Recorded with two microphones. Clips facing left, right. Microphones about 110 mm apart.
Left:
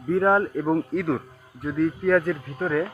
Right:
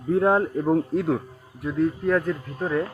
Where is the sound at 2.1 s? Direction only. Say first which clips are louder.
Left 4 dB; 5° right (ahead or behind).